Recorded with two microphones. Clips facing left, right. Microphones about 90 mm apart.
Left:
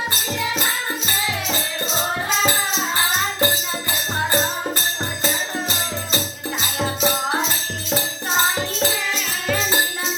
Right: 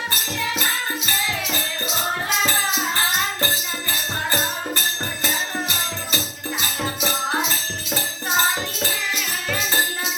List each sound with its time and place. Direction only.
5.2 s music: 15° left (ahead or behind)